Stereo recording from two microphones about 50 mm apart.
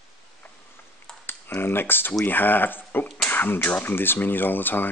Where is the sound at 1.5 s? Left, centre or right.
Left.